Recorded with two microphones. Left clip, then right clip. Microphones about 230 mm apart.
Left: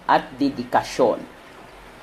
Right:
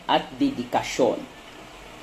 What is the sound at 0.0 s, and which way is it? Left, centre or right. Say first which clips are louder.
Speech: left 3 dB; left.